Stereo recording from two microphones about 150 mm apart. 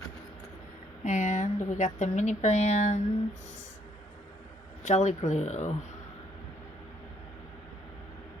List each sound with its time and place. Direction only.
1.0 s speech: 55° left (ahead or behind)
4.8 s speech: 50° left (ahead or behind)